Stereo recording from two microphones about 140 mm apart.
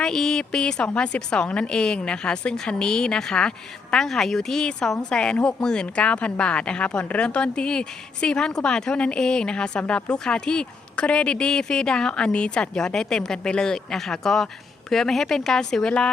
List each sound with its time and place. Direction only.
0.0 s a woman's voice: 5° left (ahead or behind)